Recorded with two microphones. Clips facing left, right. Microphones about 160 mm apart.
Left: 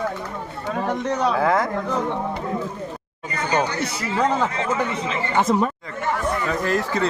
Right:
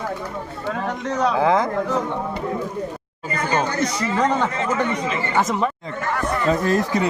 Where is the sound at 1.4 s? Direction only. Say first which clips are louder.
Right 3 dB; 20° right (ahead or behind).